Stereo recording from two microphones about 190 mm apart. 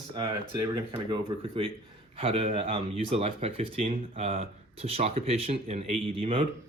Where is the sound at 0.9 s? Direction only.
25° right (ahead or behind).